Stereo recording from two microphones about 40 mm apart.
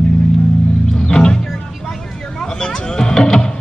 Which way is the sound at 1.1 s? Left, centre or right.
Left.